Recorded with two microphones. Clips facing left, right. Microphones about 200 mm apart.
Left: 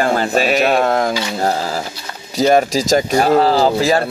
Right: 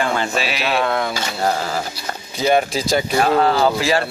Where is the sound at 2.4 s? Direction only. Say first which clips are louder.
Left 4 dB; 40° left (ahead or behind).